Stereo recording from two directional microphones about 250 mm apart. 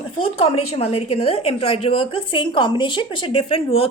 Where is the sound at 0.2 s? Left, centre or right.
Left.